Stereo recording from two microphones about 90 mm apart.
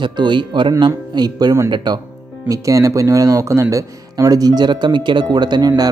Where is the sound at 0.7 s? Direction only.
45° right (ahead or behind).